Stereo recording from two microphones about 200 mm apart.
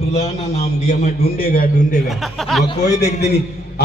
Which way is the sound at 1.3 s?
45° left (ahead or behind).